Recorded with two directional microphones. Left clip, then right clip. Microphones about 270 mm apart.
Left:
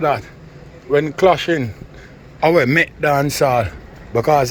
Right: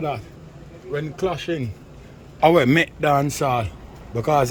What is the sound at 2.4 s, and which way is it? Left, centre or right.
Speech, centre.